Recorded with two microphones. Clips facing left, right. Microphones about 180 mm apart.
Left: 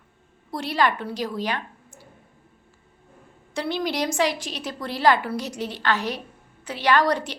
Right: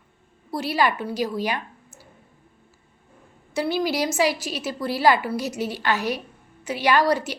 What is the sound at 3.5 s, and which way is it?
A woman's voice, 5° right (ahead or behind).